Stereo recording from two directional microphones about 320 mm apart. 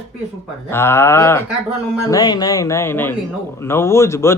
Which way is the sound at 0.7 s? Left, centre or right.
Centre.